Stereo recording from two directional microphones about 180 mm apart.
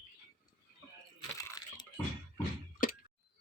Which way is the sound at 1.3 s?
20° left (ahead or behind).